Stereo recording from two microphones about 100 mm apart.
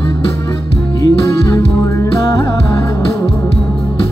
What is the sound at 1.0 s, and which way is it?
Music, 35° left (ahead or behind).